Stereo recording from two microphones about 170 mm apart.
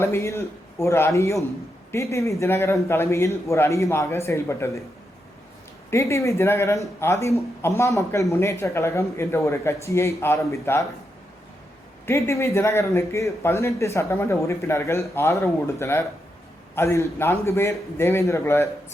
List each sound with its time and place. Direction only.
0.0 s speech: 15° left (ahead or behind)
5.9 s speech: 15° left (ahead or behind)
12.0 s speech: 15° left (ahead or behind)